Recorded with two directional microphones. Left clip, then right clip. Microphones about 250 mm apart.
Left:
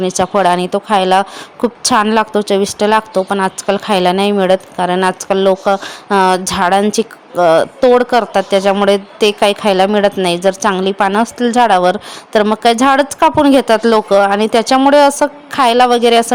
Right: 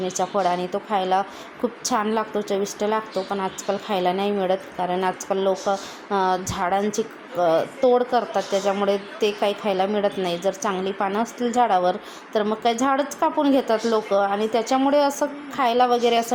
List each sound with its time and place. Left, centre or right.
0.0 s a woman's voice: left